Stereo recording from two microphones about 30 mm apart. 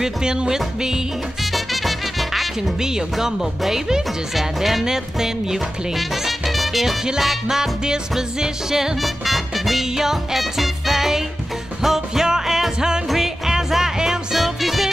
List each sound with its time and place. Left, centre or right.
0.2 s music: right
1.4 s music: centre
2.8 s speech: centre
4.8 s speech: centre
5.9 s music: centre
7.4 s speech: centre
9.0 s music: centre
14.4 s music: centre